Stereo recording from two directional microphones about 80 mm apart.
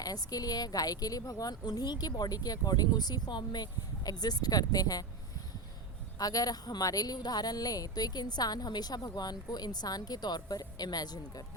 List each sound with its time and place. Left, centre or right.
0.0 s speech: left
6.1 s speech: left